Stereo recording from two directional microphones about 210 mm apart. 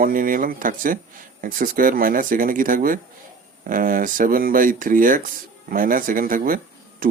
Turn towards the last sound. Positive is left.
turn(degrees=-40)  # may be behind; listen again after turning